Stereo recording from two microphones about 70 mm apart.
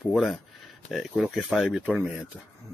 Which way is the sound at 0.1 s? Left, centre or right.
Centre.